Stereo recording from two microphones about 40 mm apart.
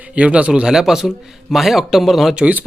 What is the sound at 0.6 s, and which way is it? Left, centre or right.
A man's voice, centre.